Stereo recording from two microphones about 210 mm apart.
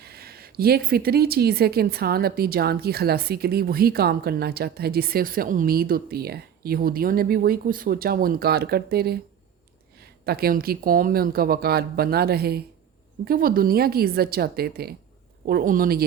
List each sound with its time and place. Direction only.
0.0 s speech: 50° right (ahead or behind)